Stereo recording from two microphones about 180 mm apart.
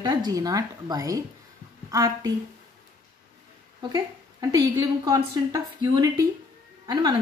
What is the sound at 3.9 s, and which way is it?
A woman's voice, 20° right (ahead or behind).